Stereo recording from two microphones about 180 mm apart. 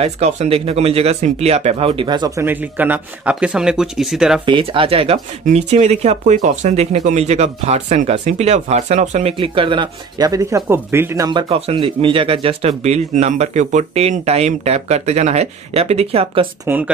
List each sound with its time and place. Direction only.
0.0 s speech: 35° right (ahead or behind); by 4.4 s centre (ahead or behind)
4.5 s speech: 30° right (ahead or behind)
9.4 s speech: 25° right (ahead or behind)
11.2 s speech: 25° right (ahead or behind)
16.6 s speech: 10° right (ahead or behind)